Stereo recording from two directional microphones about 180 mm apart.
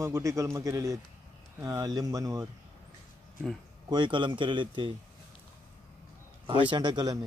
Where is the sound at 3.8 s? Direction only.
25° right (ahead or behind).